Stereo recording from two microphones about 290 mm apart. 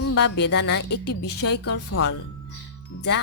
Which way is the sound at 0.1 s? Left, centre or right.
Left.